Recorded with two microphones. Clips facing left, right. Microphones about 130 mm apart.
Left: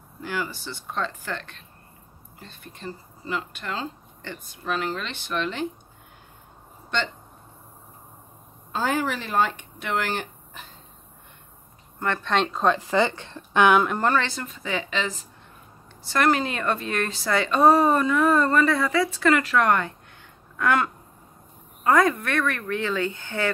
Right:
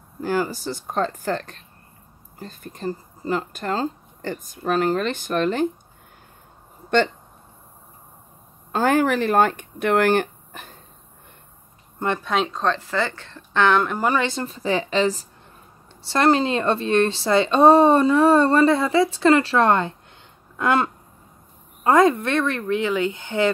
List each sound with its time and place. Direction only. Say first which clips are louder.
0.2 s speech: right 7 dB; 40° right (ahead or behind)
8.7 s speech: right 7 dB; 55° right (ahead or behind)
12.0 s speech: right 3 dB; 20° right (ahead or behind)
12.3 s speech: right 1 dB; centre (ahead or behind)
12.6 s speech: left 2 dB; 15° left (ahead or behind)
13.8 s speech: right 1 dB; 5° right (ahead or behind)
14.1 s speech: right 2 dB; 20° right (ahead or behind)
14.4 s speech: right 7 dB; 35° right (ahead or behind)
20.5 s a sound: right 2 dB; 25° right (ahead or behind)
21.8 s speech: right 4 dB; 25° right (ahead or behind)